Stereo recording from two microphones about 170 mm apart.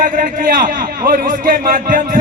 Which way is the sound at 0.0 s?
50° right (ahead or behind).